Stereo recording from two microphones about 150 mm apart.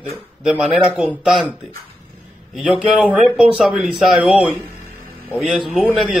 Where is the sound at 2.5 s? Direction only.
5° right (ahead or behind).